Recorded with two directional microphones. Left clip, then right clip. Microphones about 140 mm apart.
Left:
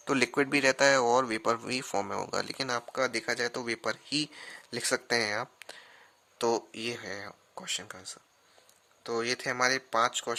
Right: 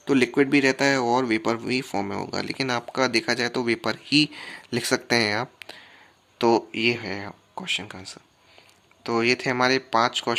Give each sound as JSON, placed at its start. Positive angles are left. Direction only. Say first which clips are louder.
{"t": 0.0, "sound": "speech", "louder": "right 7 dB", "side_deg": 55}
{"t": 7.6, "sound": "speech", "louder": "right 8 dB", "side_deg": 50}
{"t": 9.0, "sound": "speech", "louder": "right 9 dB", "side_deg": 35}